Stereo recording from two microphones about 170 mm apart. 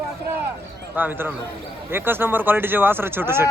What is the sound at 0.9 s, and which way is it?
Speech, 10° right (ahead or behind).